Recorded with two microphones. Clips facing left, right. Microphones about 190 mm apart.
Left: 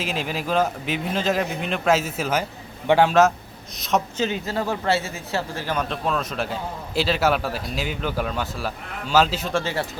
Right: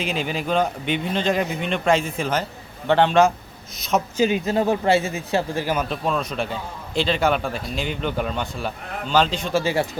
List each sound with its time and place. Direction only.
0.0 s speech: centre (ahead or behind)
4.2 s speech: 15° right (ahead or behind)